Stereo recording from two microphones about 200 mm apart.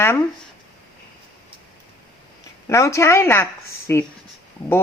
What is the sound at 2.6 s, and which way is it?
Speech, 15° left (ahead or behind).